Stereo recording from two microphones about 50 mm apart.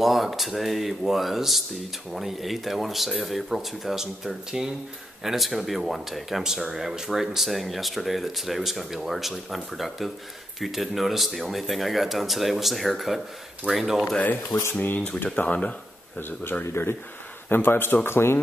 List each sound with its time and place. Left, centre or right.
0.0 s speech: centre
14.5 s speech: left
15.3 s speech: left
16.2 s speech: left
16.8 s speech: left
17.5 s speech: left